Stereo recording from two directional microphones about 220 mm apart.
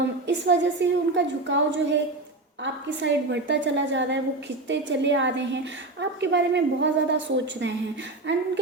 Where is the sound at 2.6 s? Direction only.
55° right (ahead or behind).